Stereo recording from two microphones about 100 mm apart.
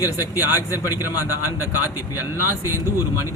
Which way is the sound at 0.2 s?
20° right (ahead or behind).